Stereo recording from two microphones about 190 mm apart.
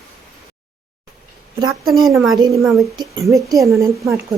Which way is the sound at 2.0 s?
Centre (ahead or behind).